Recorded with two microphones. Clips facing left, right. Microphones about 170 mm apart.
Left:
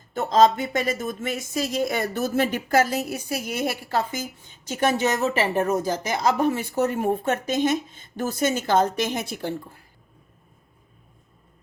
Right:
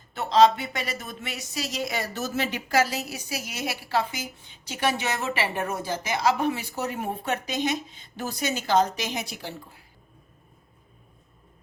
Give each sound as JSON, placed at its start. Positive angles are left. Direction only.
{"t": 0.1, "sound": "speech", "side_deg": 45}